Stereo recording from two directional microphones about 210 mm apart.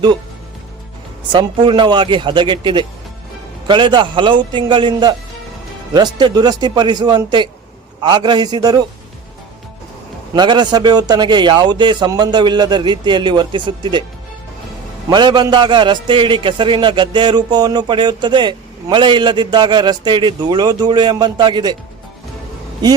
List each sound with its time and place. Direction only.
1.3 s a man's voice: 20° right (ahead or behind)
10.3 s a man's voice: 20° right (ahead or behind)
15.1 s a man's voice: 20° right (ahead or behind)
22.8 s a man's voice: 20° right (ahead or behind)